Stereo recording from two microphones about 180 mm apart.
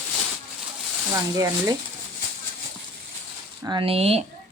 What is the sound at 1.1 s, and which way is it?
Speech, 15° right (ahead or behind).